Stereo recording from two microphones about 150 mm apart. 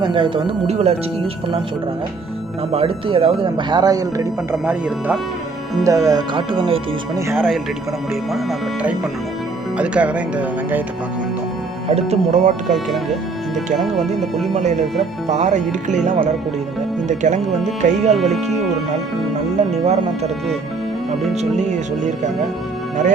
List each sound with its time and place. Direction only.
0.0 s speech: 35° right (ahead or behind)
0.7 s speech: 45° right (ahead or behind)
2.7 s speech: 35° right (ahead or behind)
4.6 s speech: 10° right (ahead or behind)
5.8 s speech: 20° right (ahead or behind)
7.3 s speech: centre (ahead or behind)
11.9 s speech: 45° right (ahead or behind)
12.7 s speech: centre (ahead or behind)
14.5 s speech: 50° right (ahead or behind)
19.5 s speech: 45° right (ahead or behind)
21.3 s speech: 50° right (ahead or behind)